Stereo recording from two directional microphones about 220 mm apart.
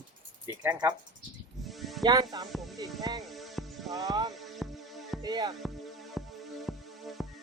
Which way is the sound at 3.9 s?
15° right (ahead or behind).